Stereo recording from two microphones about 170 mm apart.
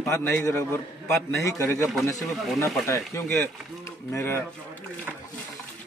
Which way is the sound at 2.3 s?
Centre (ahead or behind).